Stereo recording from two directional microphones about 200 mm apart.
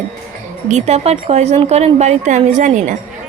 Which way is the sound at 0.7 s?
35° right (ahead or behind).